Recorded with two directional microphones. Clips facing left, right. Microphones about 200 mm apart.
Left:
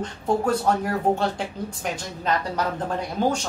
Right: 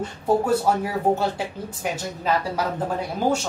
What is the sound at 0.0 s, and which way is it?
A woman's voice, 5° right (ahead or behind).